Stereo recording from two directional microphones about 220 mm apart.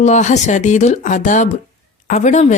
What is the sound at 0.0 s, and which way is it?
A woman's voice, 30° left (ahead or behind).